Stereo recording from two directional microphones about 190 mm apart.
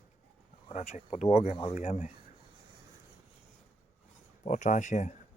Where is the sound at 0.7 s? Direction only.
35° left (ahead or behind).